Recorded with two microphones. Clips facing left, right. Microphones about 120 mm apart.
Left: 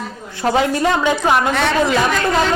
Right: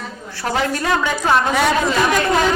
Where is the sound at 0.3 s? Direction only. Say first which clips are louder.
Left 4 dB; 20° left (ahead or behind).